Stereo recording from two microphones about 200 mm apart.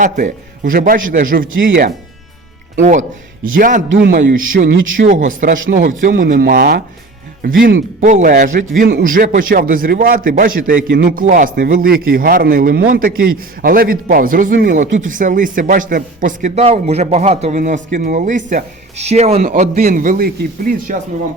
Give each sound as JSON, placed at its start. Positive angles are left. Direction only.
{"t": 0.0, "sound": "a man's voice", "side_deg": -40}
{"t": 3.6, "sound": "a man's voice", "side_deg": -40}
{"t": 3.9, "sound": "speech", "side_deg": -60}
{"t": 5.0, "sound": "a man's voice", "side_deg": -40}
{"t": 8.0, "sound": "a man's voice", "side_deg": -40}